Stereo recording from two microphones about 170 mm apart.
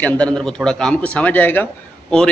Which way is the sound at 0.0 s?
5° left (ahead or behind).